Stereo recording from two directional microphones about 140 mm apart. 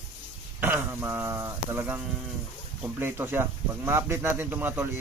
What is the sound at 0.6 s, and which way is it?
Speech, 15° right (ahead or behind).